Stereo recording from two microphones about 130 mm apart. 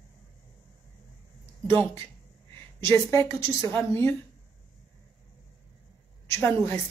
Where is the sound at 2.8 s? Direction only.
20° left (ahead or behind).